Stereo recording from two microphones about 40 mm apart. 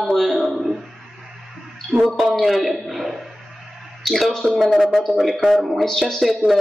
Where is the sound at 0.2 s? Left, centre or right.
Centre.